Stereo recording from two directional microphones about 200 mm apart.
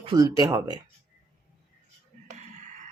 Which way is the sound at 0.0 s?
20° right (ahead or behind).